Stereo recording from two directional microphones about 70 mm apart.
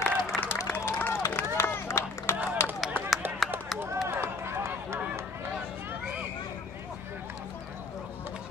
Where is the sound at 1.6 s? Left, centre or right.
Left.